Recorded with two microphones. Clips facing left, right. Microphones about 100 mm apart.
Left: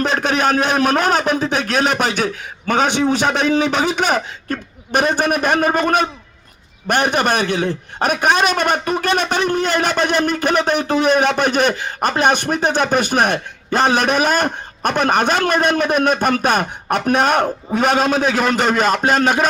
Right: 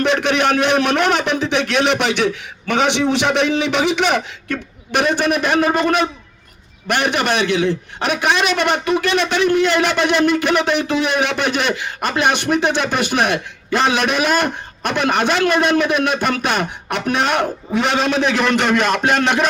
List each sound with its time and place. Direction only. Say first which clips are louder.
0.0 s a man's voice: right 1 dB; 40° left (ahead or behind)